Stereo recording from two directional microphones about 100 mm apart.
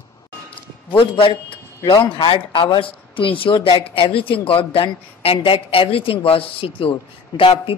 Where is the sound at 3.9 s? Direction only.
65° left (ahead or behind).